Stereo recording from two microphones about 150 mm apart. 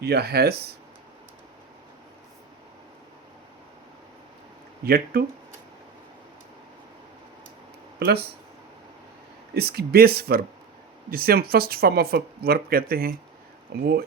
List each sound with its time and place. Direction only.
0.0 s speech: 90° right
4.9 s speech: 90° right
7.9 s speech: 90° right
9.6 s speech: 90° right